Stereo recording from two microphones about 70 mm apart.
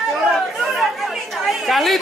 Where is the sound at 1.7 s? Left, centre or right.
Centre.